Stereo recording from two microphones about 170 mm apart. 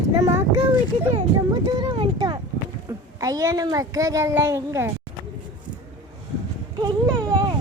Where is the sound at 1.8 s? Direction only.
25° right (ahead or behind).